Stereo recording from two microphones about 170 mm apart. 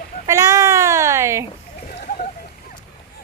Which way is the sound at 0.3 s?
20° right (ahead or behind).